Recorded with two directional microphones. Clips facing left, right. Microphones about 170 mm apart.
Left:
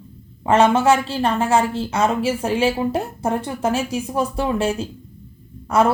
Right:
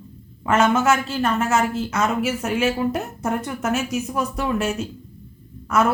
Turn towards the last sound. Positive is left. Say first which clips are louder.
# left 3 dB
turn(degrees=30)  # may be behind; listen again after turning